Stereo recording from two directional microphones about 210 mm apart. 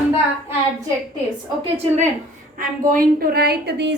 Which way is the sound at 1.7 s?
30° right (ahead or behind).